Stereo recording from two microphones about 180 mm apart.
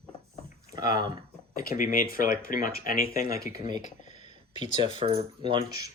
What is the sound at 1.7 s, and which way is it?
Speech, 50° left (ahead or behind).